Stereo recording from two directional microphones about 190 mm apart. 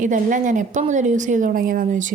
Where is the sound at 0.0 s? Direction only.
40° right (ahead or behind).